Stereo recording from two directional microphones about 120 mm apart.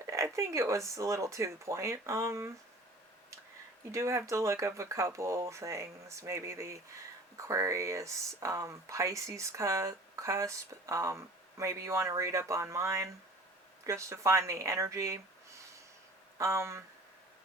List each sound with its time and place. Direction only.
0.0 s a sound: 25° right (ahead or behind)
0.9 s speech: 25° right (ahead or behind)
3.9 s speech: 25° right (ahead or behind)